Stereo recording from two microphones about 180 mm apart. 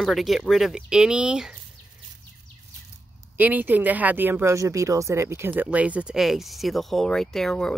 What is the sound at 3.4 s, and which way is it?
Speech, 10° right (ahead or behind).